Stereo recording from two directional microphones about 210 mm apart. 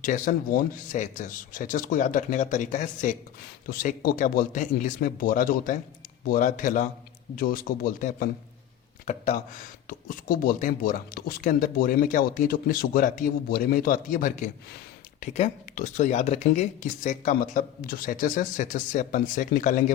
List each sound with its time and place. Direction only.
0.0 s speech: 40° left (ahead or behind)